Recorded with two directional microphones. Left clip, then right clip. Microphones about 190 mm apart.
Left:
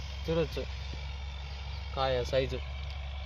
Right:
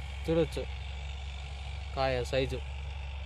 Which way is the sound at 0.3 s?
45° right (ahead or behind).